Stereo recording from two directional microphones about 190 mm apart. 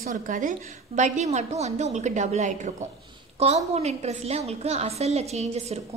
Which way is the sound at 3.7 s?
35° right (ahead or behind).